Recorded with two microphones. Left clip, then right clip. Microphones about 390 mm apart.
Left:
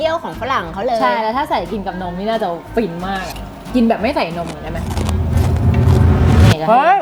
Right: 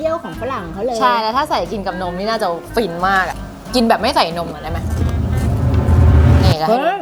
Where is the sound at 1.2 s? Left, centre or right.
Centre.